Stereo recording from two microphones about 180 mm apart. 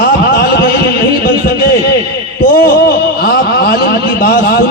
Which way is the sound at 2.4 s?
55° left (ahead or behind).